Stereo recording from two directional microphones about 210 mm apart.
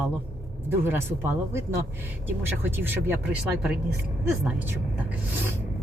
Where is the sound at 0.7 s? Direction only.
10° right (ahead or behind).